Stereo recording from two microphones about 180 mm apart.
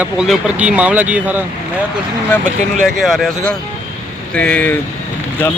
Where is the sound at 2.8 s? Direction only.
Centre (ahead or behind).